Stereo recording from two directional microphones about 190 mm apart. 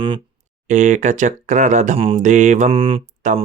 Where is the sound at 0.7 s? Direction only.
40° right (ahead or behind).